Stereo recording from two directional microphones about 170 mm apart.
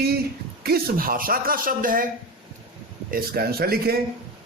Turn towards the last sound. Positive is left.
turn(degrees=-65)  # may be behind; listen again after turning